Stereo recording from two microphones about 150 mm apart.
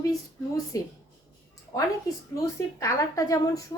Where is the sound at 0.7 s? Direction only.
20° left (ahead or behind).